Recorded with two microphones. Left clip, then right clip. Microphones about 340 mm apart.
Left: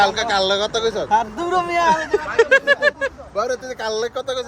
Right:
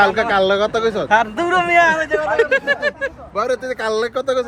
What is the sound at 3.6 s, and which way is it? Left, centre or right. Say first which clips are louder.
Speech: right 4 dB; right.